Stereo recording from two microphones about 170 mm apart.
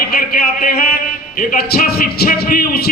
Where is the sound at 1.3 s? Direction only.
60° left (ahead or behind).